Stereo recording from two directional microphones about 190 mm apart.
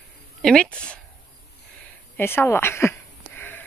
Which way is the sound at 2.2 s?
10° left (ahead or behind).